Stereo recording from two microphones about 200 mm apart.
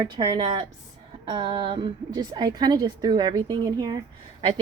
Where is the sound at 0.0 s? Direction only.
25° right (ahead or behind).